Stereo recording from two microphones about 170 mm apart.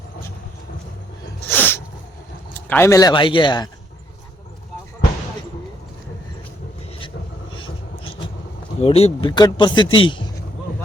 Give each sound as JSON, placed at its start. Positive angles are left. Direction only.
{"t": 1.5, "sound": "sneeze", "side_deg": 10}
{"t": 2.6, "sound": "a man's voice", "side_deg": 15}
{"t": 8.8, "sound": "a man's voice", "side_deg": 35}